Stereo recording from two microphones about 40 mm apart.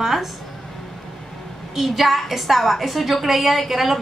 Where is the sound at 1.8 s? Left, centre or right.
Centre.